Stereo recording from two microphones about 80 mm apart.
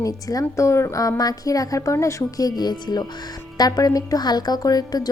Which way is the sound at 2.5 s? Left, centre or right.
Left.